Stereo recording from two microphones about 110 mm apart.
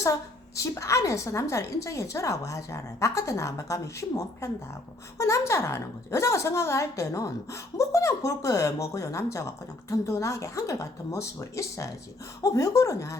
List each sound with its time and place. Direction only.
0.0 s a woman's voice: 30° left (ahead or behind)